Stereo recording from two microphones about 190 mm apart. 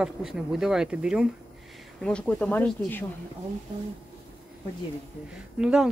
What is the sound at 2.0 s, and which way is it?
Speech, 5° left (ahead or behind).